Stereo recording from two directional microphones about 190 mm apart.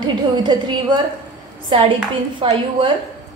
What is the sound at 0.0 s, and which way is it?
Speech, 25° right (ahead or behind).